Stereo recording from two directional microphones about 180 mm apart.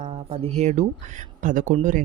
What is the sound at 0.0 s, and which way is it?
Speech, 35° right (ahead or behind).